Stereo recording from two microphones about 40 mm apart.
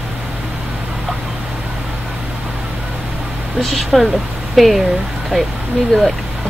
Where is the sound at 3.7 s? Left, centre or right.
Centre.